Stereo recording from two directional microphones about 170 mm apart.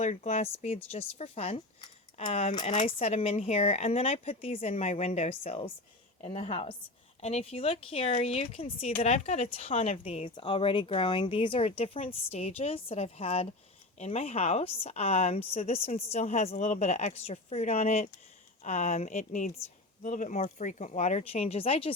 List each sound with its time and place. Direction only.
0.0 s speech: 40° left (ahead or behind)